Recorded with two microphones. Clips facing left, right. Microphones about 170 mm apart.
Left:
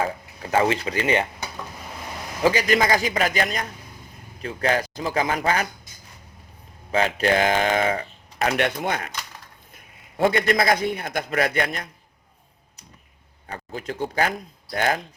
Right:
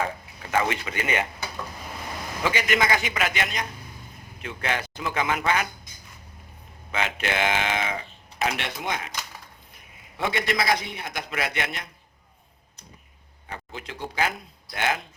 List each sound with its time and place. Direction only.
0.5 s a man's voice: 35° left (ahead or behind)
2.4 s a man's voice: 35° left (ahead or behind)
6.9 s speech: 35° left (ahead or behind); by 9.1 s 55° left (ahead or behind)
10.2 s speech: 45° left (ahead or behind)
13.7 s speech: 45° left (ahead or behind)